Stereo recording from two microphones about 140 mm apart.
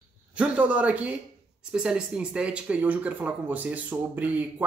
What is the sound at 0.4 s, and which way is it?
A man's voice, 10° right (ahead or behind).